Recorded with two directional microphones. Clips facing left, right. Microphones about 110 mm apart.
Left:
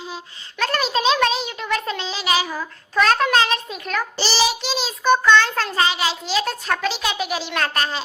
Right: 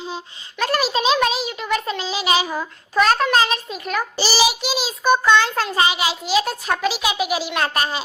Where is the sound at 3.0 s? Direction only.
5° right (ahead or behind).